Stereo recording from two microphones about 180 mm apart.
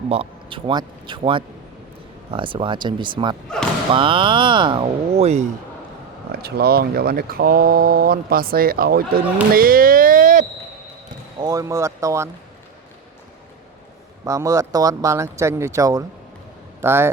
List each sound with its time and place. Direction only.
0.1 s speech: 30° right (ahead or behind)
6.3 s speech: 60° right (ahead or behind)
11.3 s speech: 20° right (ahead or behind)
14.3 s speech: 15° right (ahead or behind)